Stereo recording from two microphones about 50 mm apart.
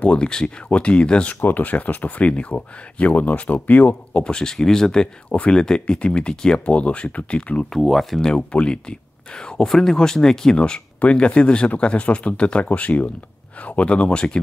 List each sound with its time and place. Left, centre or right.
0.0 s speech: left
1.4 s speech: left
4.2 s speech: centre
5.3 s speech: left
7.7 s speech: centre
8.2 s speech: centre
9.7 s speech: centre